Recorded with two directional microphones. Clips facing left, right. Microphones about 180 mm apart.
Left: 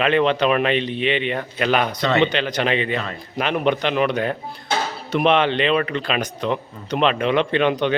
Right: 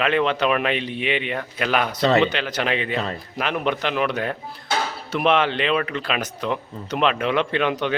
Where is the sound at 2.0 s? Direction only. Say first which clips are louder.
Right 2 dB; 35° right (ahead or behind).